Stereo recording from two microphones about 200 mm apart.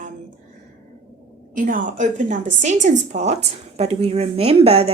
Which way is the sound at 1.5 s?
40° right (ahead or behind).